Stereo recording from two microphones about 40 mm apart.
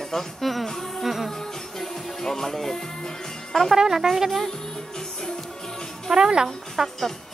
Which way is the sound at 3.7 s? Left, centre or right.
Centre.